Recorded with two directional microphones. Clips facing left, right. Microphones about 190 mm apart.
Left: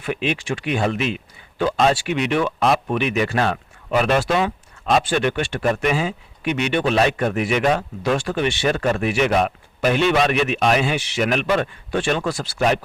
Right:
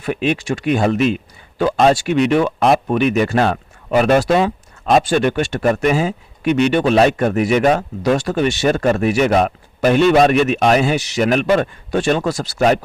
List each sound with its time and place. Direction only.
0.0 s speech: 40° right (ahead or behind)